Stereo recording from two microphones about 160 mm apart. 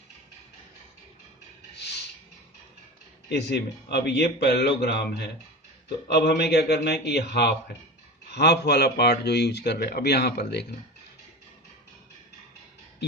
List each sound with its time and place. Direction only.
3.2 s speech: 90° left